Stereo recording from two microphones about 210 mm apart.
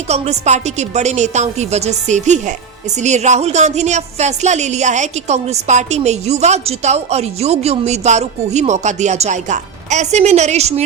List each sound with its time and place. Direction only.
0.1 s a woman's voice: 30° right (ahead or behind)